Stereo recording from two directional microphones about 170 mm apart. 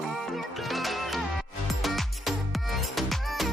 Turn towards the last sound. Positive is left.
turn(degrees=0)  # may be behind; listen again after turning